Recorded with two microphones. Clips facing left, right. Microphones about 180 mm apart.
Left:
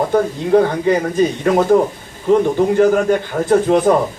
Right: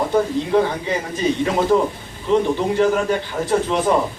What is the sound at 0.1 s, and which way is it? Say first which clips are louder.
Speech: left 4 dB; 50° left (ahead or behind).